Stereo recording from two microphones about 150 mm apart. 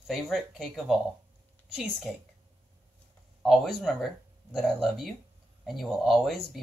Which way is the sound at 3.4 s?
Centre (ahead or behind).